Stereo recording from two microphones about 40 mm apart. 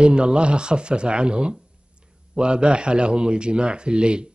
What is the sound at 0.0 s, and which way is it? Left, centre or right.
Speech, right.